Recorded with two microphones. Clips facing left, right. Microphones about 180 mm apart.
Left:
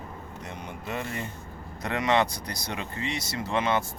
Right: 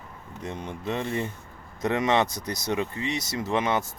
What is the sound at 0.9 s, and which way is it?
Speech, 25° right (ahead or behind).